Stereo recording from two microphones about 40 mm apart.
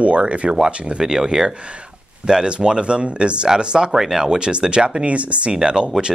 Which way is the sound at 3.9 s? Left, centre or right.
Centre.